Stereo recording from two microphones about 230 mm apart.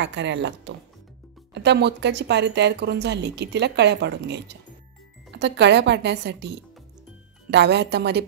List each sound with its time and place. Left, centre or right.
0.0 s speech: right
7.5 s speech: right